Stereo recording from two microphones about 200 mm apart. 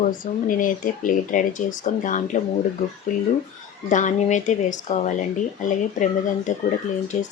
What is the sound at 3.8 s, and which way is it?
Speech, 40° left (ahead or behind).